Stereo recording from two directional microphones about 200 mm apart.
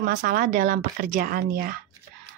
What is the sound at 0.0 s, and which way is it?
Speech, 40° right (ahead or behind).